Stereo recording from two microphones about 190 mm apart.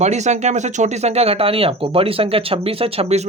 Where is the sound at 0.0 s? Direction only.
35° right (ahead or behind).